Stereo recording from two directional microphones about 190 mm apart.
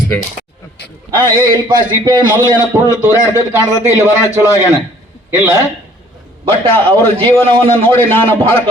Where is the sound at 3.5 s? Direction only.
15° right (ahead or behind).